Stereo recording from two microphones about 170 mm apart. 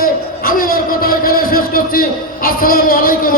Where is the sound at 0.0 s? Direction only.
55° left (ahead or behind).